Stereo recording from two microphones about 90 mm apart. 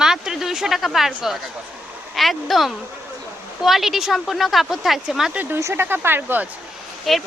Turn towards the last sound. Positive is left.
turn(degrees=0)  # may be behind; listen again after turning